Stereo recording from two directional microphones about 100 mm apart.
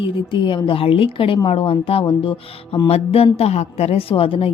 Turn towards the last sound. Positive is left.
turn(degrees=65)  # may be behind; listen again after turning